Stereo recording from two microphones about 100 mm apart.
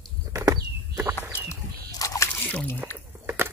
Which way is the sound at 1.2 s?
25° left (ahead or behind).